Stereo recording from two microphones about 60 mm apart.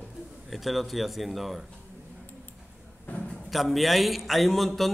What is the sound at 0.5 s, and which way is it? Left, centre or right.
A man's voice, centre.